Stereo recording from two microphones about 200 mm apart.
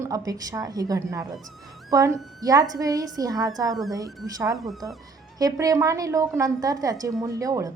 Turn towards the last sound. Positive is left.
turn(degrees=-15)  # may be behind; listen again after turning